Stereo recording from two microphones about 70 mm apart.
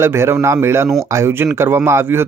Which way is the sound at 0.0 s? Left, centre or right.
Right.